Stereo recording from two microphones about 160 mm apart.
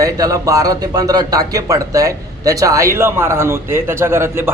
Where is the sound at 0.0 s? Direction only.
20° right (ahead or behind).